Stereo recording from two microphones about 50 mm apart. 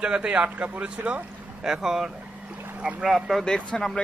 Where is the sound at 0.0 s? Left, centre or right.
Right.